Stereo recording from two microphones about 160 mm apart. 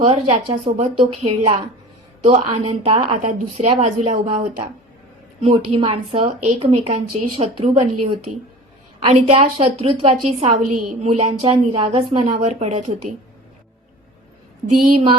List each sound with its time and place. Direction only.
0.0 s a woman's voice: 40° right (ahead or behind)
9.0 s speech: 40° right (ahead or behind)
12.3 s a woman's voice: 45° right (ahead or behind)
14.6 s speech: 70° right (ahead or behind)